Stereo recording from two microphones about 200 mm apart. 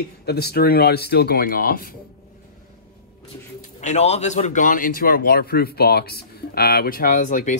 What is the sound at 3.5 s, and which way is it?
Speech, 35° left (ahead or behind).